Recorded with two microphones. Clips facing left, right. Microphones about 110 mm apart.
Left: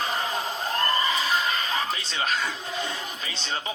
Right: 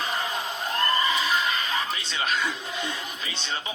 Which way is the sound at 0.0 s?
35° left (ahead or behind).